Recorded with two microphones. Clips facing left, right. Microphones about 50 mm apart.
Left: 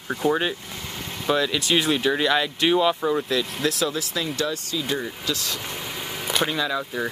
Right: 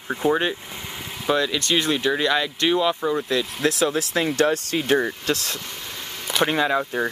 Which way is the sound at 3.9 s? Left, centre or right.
Right.